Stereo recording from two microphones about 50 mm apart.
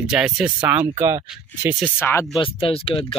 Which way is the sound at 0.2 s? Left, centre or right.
Right.